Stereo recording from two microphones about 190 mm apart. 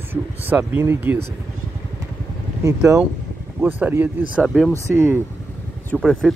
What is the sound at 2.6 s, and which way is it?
Speech, 15° right (ahead or behind).